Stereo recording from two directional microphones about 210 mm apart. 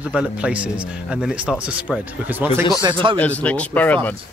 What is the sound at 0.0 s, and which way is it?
Speech, 5° right (ahead or behind).